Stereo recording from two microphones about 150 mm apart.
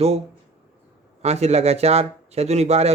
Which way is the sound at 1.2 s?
45° right (ahead or behind).